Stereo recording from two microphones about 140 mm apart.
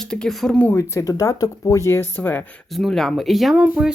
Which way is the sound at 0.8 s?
20° left (ahead or behind).